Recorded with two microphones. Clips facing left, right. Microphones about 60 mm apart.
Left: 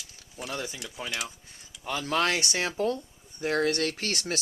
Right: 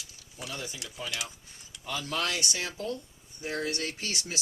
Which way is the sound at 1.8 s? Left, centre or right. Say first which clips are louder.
Left 5 dB; left.